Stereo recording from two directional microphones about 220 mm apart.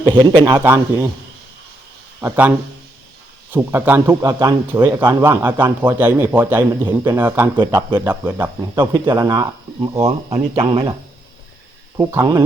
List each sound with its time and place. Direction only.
0.0 s a man's voice: 20° right (ahead or behind)
2.2 s a man's voice: 10° right (ahead or behind)
3.5 s a man's voice: 10° right (ahead or behind)
7.5 s speech: 20° right (ahead or behind)
8.0 s a man's voice: 10° right (ahead or behind)
8.8 s a man's voice: 20° right (ahead or behind)
10.0 s speech: 30° right (ahead or behind)
11.9 s a man's voice: 15° right (ahead or behind)